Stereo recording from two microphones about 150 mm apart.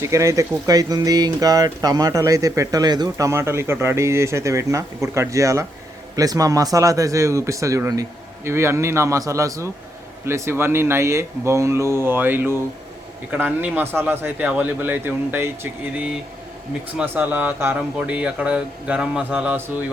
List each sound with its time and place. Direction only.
0.0 s a man's voice: 20° right (ahead or behind)